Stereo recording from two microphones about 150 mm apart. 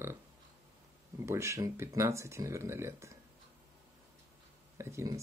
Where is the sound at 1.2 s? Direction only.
20° right (ahead or behind).